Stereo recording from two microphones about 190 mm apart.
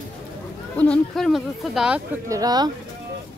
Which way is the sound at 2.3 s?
20° right (ahead or behind).